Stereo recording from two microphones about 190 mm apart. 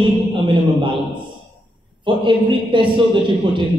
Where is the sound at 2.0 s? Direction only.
25° right (ahead or behind).